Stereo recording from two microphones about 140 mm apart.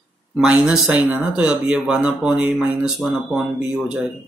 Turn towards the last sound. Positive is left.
turn(degrees=-5)  # may be behind; listen again after turning